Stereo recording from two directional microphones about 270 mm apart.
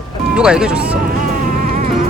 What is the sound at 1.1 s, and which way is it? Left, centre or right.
Music, right.